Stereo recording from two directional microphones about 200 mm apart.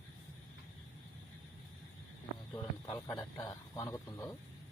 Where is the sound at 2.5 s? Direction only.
15° left (ahead or behind).